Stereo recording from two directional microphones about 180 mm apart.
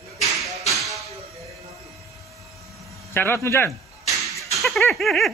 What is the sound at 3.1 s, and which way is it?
Speech, 10° left (ahead or behind).